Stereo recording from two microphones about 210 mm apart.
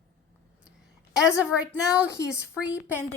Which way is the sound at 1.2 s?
5° right (ahead or behind).